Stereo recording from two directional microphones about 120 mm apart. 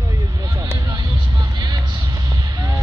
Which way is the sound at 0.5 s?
20° right (ahead or behind).